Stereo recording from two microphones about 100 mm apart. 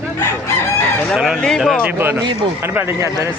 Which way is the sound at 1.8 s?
20° right (ahead or behind).